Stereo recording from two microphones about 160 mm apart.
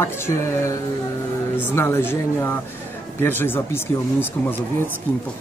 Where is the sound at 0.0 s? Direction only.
15° left (ahead or behind).